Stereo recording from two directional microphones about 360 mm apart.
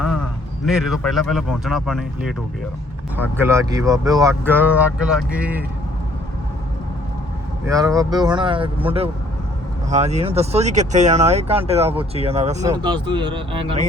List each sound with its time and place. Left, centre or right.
0.6 s speech: centre
3.2 s speech: centre
7.6 s speech: centre